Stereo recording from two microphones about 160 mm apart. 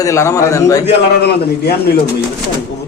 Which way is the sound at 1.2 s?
85° left.